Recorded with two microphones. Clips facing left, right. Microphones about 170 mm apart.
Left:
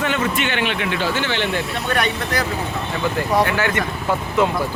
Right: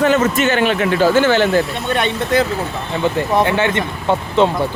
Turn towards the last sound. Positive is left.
turn(degrees=-25)  # may be behind; listen again after turning